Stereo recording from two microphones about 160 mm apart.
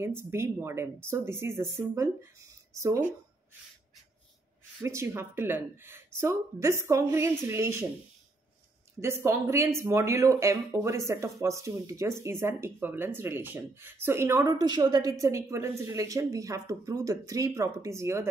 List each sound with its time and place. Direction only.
0.3 s speech: 15° right (ahead or behind)
4.8 s speech: 15° right (ahead or behind)
9.0 s speech: 15° right (ahead or behind)